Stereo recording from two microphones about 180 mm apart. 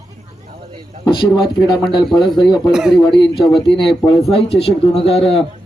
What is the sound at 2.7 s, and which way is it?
Speech, centre (ahead or behind).